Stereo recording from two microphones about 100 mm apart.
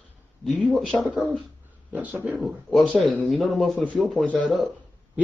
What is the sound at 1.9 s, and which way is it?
Speech, 15° right (ahead or behind).